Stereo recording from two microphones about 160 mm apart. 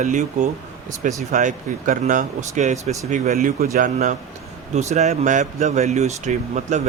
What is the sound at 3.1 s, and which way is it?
Speech, 60° right (ahead or behind).